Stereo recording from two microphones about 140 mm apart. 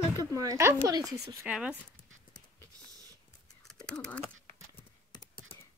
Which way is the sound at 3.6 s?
5° left (ahead or behind).